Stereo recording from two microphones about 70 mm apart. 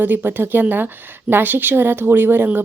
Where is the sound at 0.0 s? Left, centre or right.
Right.